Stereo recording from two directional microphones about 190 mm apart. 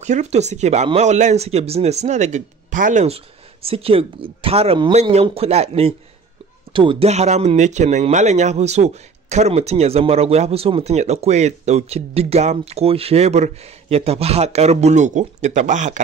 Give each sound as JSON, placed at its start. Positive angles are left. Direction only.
{"t": 0.0, "sound": "speech", "side_deg": -35}